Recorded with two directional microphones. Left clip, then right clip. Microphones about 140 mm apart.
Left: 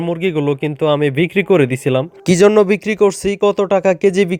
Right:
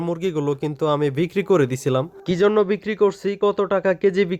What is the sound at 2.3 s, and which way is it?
Speech, 40° left (ahead or behind).